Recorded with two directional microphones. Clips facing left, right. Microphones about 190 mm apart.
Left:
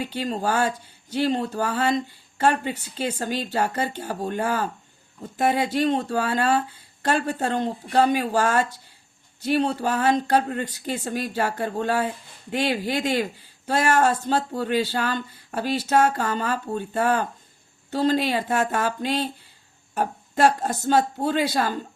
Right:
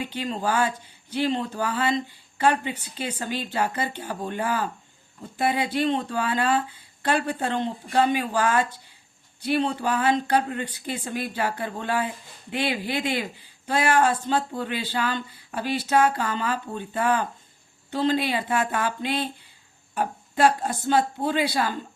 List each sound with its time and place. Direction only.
0.0 s speech: 40° left (ahead or behind)